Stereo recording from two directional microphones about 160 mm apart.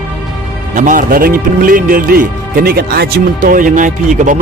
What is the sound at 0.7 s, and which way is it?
Speech, 55° right (ahead or behind).